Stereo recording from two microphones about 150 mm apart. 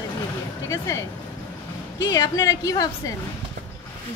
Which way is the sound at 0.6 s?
20° left (ahead or behind).